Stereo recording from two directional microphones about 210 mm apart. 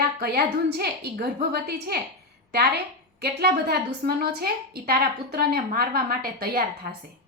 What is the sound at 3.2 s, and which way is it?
A woman's voice, 50° right (ahead or behind).